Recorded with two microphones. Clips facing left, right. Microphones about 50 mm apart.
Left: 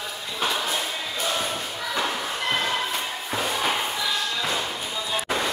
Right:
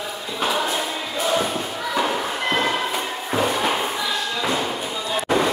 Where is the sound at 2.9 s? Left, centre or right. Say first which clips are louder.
Right 4 dB; centre.